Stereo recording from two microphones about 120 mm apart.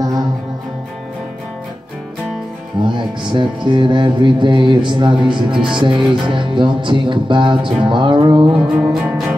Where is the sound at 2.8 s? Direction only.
40° right (ahead or behind).